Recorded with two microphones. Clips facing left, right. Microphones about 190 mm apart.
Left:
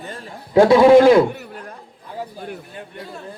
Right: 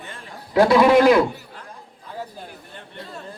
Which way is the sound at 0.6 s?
25° left (ahead or behind).